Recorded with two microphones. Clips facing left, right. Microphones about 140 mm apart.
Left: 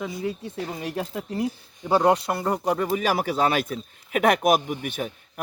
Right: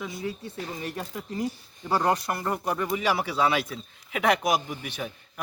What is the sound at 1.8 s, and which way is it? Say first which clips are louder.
Speech: left 5 dB; 20° left (ahead or behind).